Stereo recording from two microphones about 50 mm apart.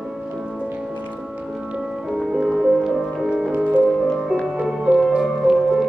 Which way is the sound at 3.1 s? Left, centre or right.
Centre.